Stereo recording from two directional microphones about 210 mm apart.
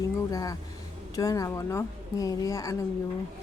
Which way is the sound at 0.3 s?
15° left (ahead or behind).